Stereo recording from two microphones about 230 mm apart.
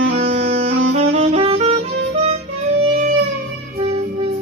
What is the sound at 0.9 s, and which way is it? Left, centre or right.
Music, right.